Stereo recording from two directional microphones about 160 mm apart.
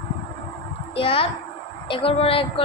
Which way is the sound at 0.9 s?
35° left (ahead or behind).